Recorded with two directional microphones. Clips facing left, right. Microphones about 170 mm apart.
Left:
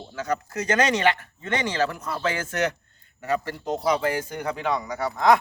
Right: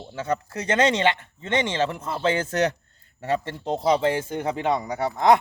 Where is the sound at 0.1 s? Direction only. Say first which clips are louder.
Right 1 dB; 30° right (ahead or behind).